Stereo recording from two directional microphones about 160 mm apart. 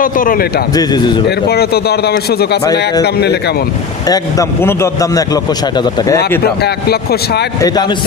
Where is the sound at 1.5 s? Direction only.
80° left.